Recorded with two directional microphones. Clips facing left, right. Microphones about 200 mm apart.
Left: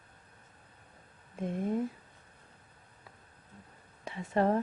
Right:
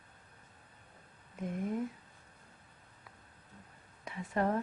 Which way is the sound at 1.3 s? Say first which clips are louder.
Left 4 dB; 30° left (ahead or behind).